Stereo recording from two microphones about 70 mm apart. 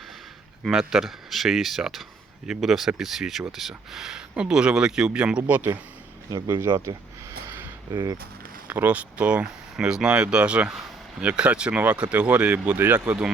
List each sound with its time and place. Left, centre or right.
0.6 s speech: centre; by 5.6 s right
6.5 s speech: right
7.9 s speech: right
8.6 s speech: right